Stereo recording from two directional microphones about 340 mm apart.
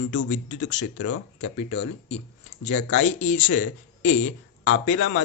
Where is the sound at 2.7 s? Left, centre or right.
Left.